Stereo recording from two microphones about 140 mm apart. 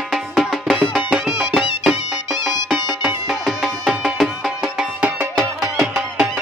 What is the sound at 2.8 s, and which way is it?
Music, centre (ahead or behind).